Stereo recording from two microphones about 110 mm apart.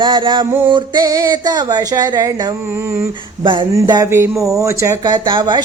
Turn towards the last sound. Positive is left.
turn(degrees=-40)  # may be behind; listen again after turning